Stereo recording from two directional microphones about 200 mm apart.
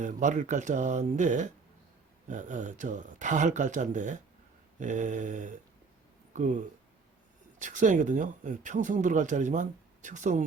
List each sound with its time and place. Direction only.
0.0 s speech: 40° right (ahead or behind)
7.6 s speech: 40° right (ahead or behind)